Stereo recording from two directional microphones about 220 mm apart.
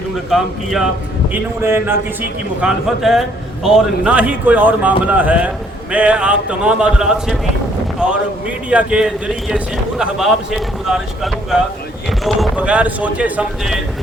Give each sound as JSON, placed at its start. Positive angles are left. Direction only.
{"t": 0.3, "sound": "a man's voice", "side_deg": 0}